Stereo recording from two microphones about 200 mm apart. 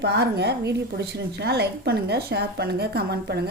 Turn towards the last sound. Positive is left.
turn(degrees=-55)  # may be behind; listen again after turning